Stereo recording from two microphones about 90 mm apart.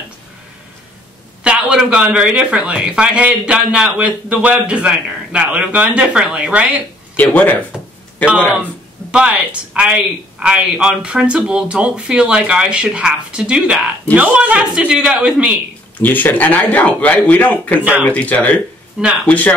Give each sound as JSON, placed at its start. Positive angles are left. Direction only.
{"t": 1.4, "sound": "speech", "side_deg": -10}
{"t": 7.2, "sound": "speech", "side_deg": 15}
{"t": 7.7, "sound": "a sound", "side_deg": -5}
{"t": 8.3, "sound": "speech", "side_deg": -15}
{"t": 16.0, "sound": "speech", "side_deg": 20}
{"t": 17.7, "sound": "speech", "side_deg": -20}
{"t": 18.0, "sound": "speech", "side_deg": 15}